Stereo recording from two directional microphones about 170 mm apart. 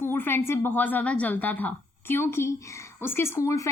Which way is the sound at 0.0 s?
15° left (ahead or behind).